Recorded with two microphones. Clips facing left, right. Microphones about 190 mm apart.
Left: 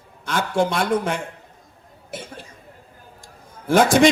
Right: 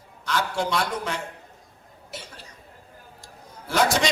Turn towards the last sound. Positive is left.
turn(degrees=50)  # may be behind; listen again after turning